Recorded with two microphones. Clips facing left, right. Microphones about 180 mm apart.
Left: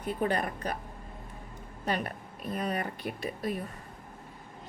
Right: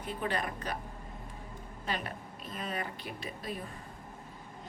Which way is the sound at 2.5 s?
40° left (ahead or behind).